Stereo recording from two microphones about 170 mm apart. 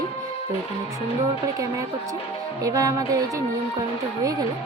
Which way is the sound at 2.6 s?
20° right (ahead or behind).